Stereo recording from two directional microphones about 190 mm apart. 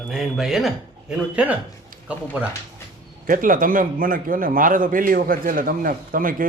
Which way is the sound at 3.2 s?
45° right (ahead or behind).